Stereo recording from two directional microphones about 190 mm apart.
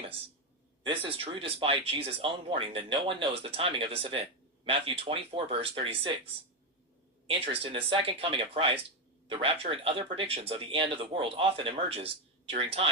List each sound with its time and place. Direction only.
0.9 s speech: 30° right (ahead or behind)
7.3 s speech: 30° right (ahead or behind)